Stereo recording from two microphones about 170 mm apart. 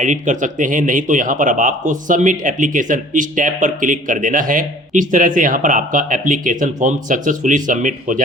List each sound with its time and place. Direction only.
0.0 s a man's voice: 45° right (ahead or behind)